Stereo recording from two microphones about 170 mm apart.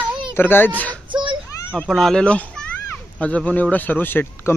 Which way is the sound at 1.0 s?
30° right (ahead or behind).